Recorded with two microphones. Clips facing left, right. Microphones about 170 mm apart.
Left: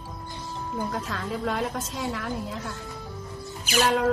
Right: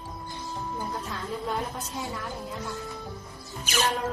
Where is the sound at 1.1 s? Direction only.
90° left.